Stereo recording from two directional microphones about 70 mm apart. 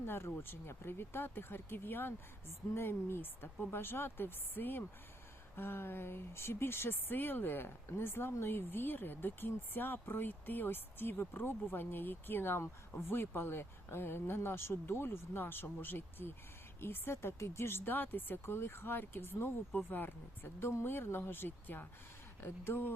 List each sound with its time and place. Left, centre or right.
0.0 s speech: left